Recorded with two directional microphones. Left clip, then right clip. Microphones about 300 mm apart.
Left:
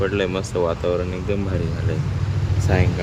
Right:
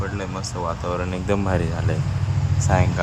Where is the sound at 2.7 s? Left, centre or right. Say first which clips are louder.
Right 1 dB; centre.